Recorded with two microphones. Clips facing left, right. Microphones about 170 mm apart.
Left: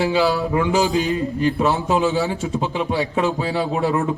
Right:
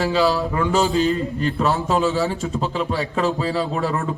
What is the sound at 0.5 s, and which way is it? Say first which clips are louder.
A man's voice: left 1 dB; 15° left (ahead or behind).